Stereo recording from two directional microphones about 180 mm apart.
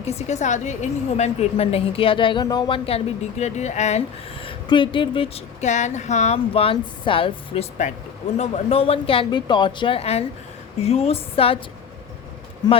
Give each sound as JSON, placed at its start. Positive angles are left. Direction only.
{"t": 0.0, "sound": "a woman's voice", "side_deg": 35}